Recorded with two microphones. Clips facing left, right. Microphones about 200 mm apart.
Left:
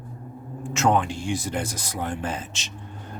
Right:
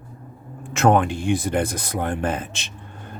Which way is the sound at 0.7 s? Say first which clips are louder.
Right 4 dB; 55° right (ahead or behind).